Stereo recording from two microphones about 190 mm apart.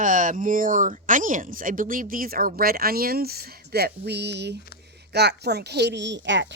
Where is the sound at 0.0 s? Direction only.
45° right (ahead or behind).